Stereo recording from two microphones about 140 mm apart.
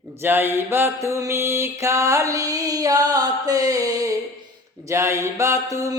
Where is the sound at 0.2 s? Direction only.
15° right (ahead or behind).